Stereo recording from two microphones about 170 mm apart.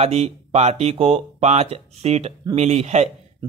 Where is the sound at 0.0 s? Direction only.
40° right (ahead or behind).